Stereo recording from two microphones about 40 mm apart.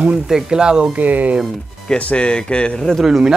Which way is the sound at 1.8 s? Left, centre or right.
Left.